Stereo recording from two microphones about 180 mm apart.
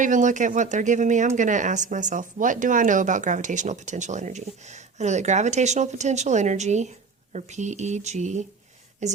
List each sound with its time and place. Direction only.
0.0 s speech: 45° right (ahead or behind)